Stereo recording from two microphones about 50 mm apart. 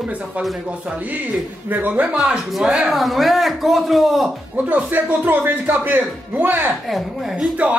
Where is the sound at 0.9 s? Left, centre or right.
Right.